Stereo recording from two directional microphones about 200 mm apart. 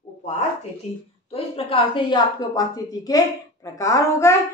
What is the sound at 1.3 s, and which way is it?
A woman's voice, 30° left (ahead or behind).